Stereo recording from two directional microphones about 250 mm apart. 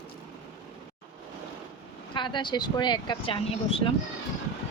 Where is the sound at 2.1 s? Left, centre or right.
Centre.